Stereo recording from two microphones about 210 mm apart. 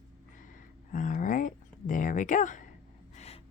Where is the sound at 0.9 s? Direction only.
40° left (ahead or behind).